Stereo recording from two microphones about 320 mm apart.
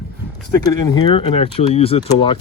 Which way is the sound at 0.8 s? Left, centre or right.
Centre.